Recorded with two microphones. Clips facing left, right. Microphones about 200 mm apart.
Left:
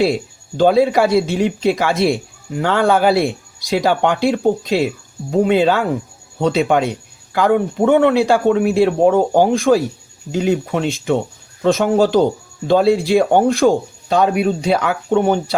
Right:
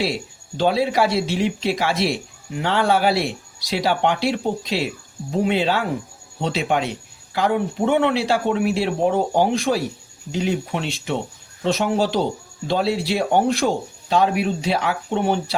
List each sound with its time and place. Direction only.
0.0 s speech: 45° left (ahead or behind)